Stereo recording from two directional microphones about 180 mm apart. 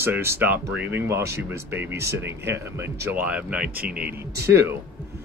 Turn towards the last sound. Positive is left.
turn(degrees=-15)  # may be behind; listen again after turning